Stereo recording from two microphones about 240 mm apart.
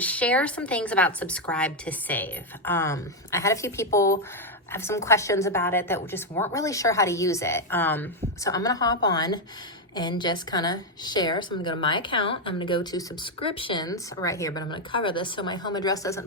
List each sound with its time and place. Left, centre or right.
0.0 s a woman's voice: centre